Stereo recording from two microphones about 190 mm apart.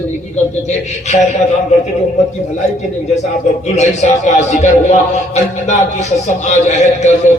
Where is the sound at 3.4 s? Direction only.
35° left (ahead or behind).